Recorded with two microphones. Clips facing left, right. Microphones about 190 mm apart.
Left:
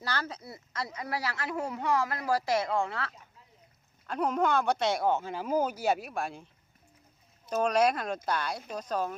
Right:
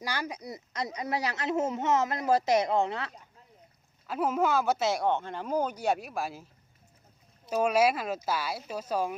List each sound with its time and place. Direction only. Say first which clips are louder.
0.0 s speech: right 1 dB; 15° right (ahead or behind)
4.0 s speech: right 1 dB; 5° right (ahead or behind)
7.5 s speech: right 1 dB; 5° right (ahead or behind)